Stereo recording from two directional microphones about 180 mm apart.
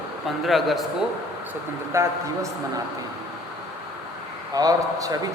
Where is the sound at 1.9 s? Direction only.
15° right (ahead or behind).